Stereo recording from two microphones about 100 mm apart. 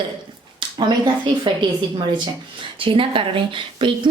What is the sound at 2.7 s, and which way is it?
Speech, 60° right (ahead or behind).